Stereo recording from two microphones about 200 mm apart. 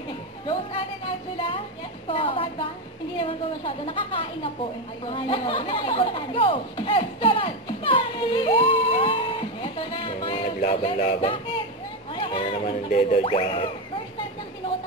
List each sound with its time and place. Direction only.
2.0 s speech: 25° left (ahead or behind)
5.1 s chatter: 25° left (ahead or behind)
12.2 s speech: 25° left (ahead or behind)